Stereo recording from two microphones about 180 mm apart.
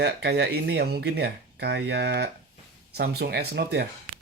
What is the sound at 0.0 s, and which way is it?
Speech, 70° right (ahead or behind).